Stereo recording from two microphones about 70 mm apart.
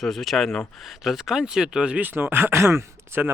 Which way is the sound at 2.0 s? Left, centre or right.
Right.